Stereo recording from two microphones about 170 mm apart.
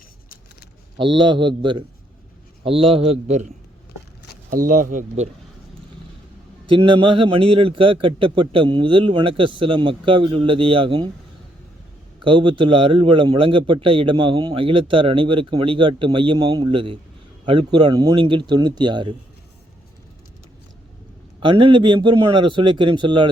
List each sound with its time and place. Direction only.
0.9 s a man's voice: 30° right (ahead or behind); by 3.5 s 45° right (ahead or behind)
4.5 s speech: 50° right (ahead or behind)
6.7 s a man's voice: 30° right (ahead or behind)
12.2 s a man's voice: 30° right (ahead or behind)
21.4 s a man's voice: 30° right (ahead or behind)